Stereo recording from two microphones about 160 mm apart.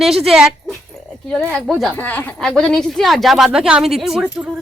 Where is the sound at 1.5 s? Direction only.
Centre (ahead or behind).